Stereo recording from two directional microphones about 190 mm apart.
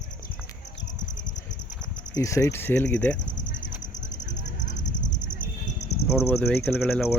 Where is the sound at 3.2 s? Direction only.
75° left (ahead or behind).